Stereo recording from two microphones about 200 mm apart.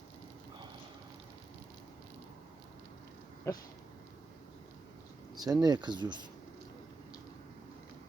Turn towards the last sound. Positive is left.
turn(degrees=-20)  # may be behind; listen again after turning